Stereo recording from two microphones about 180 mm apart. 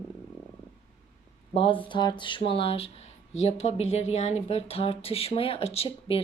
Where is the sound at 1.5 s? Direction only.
30° left (ahead or behind).